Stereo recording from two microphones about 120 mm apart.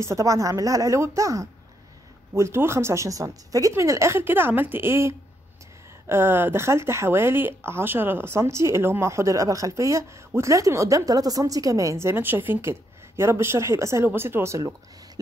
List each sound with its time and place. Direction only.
0.0 s speech: 25° right (ahead or behind)